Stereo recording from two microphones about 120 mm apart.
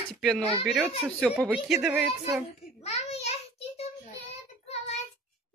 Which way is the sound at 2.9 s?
65° left (ahead or behind).